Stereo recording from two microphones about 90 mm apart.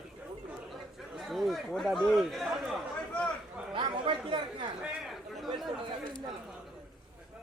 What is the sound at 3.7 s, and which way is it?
Chatter, 65° right (ahead or behind).